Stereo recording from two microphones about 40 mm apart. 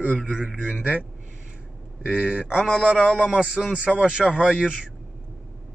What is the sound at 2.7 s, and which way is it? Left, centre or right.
A man's voice, centre.